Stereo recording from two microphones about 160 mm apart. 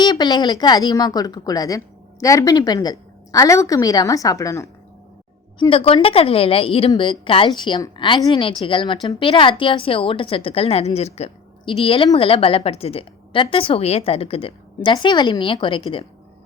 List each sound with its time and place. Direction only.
0.0 s a woman's voice: 25° left (ahead or behind)
5.5 s a woman's voice: 35° left (ahead or behind)